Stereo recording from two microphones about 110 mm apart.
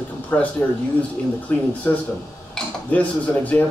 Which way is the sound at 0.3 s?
15° left (ahead or behind).